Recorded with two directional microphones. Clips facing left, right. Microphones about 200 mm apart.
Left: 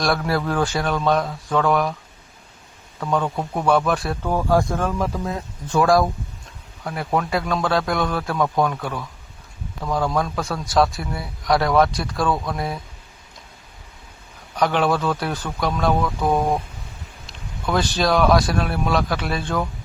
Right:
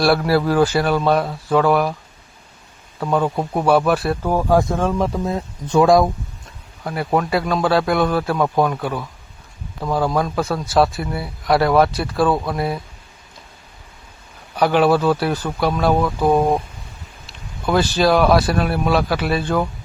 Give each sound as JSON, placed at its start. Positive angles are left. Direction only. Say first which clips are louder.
{"t": 0.0, "sound": "speech", "louder": "right 5 dB", "side_deg": -5}
{"t": 3.0, "sound": "speech", "louder": "right 3 dB", "side_deg": -5}
{"t": 3.2, "sound": "speech", "louder": "right 3 dB", "side_deg": -20}
{"t": 6.8, "sound": "speech", "louder": "right 3 dB", "side_deg": -5}
{"t": 14.5, "sound": "speech", "louder": "right 5 dB", "side_deg": -5}
{"t": 17.2, "sound": "speech", "louder": "right 4 dB", "side_deg": -5}